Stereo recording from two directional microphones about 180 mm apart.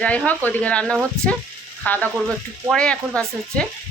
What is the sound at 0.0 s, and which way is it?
Speech, 10° left (ahead or behind).